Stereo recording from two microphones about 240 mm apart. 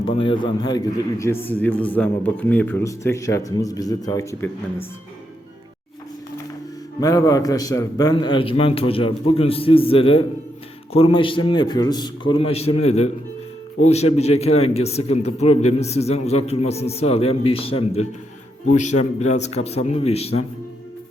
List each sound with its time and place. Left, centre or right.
0.0 s a man's voice: left
7.0 s a man's voice: centre